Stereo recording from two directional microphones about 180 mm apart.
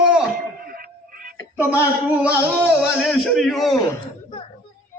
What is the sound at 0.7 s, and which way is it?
Music, 55° right (ahead or behind).